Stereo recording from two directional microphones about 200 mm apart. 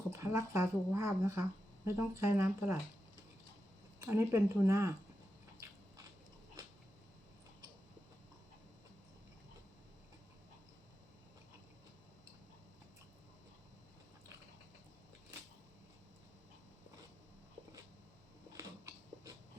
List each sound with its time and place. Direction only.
0.1 s speech: 15° right (ahead or behind)
4.0 s speech: 15° right (ahead or behind)
18.5 s dog: 15° right (ahead or behind)